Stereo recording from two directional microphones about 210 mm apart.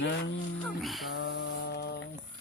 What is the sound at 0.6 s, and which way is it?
Speech, centre (ahead or behind).